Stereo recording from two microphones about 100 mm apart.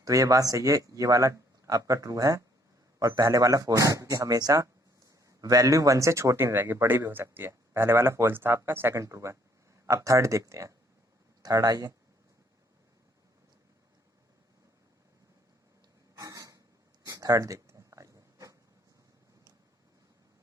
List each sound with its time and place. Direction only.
0.0 s speech: 35° right (ahead or behind)
16.1 s a sound: 30° right (ahead or behind)
17.1 s writing: 35° right (ahead or behind)